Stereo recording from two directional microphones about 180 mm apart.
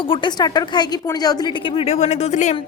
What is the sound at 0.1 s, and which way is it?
Speech, 25° left (ahead or behind).